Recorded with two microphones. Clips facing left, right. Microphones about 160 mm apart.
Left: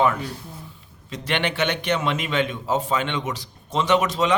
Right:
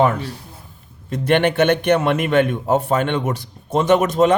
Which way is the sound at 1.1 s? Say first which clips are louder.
Right 9 dB; 55° right (ahead or behind).